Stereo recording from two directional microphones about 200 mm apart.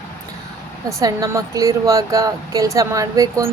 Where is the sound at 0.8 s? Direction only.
15° right (ahead or behind).